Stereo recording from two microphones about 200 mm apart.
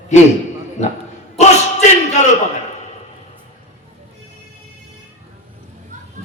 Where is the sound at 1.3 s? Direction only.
35° left (ahead or behind).